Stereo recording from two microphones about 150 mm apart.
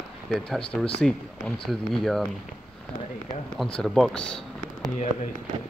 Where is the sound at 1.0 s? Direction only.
5° left (ahead or behind).